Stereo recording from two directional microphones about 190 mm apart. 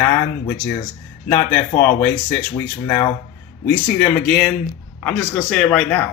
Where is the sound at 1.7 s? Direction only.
15° left (ahead or behind).